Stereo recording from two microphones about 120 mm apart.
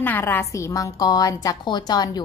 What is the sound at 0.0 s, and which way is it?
A woman's voice, 15° left (ahead or behind).